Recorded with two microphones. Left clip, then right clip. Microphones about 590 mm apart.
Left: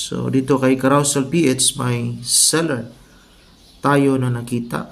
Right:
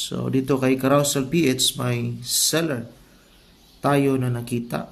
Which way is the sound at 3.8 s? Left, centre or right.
Right.